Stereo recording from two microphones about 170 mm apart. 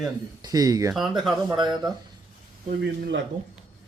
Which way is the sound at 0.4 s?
20° right (ahead or behind).